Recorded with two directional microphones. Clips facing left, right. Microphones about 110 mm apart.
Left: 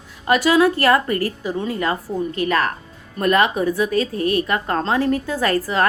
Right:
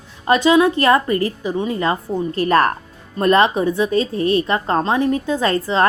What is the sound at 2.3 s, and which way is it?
A woman's voice, 40° right (ahead or behind).